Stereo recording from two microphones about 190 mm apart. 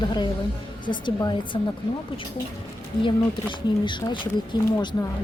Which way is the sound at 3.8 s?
25° left (ahead or behind).